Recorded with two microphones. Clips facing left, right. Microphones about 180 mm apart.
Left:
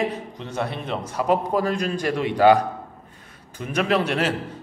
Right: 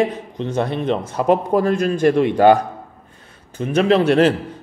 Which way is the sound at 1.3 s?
50° right (ahead or behind).